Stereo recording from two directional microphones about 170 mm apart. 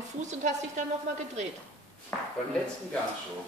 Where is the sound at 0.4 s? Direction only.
45° right (ahead or behind).